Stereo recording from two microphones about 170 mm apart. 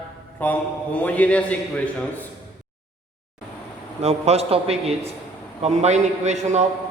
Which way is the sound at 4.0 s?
40° right (ahead or behind).